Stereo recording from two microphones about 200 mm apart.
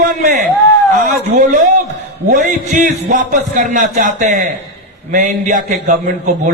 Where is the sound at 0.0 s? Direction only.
40° right (ahead or behind).